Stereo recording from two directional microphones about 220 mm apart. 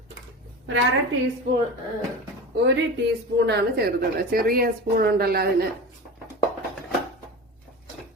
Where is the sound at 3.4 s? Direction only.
50° right (ahead or behind).